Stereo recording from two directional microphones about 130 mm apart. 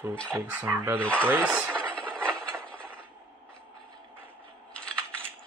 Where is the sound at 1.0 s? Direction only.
10° left (ahead or behind).